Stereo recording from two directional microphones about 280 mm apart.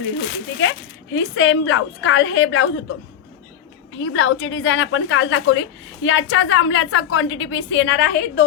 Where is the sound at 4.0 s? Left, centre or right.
Left.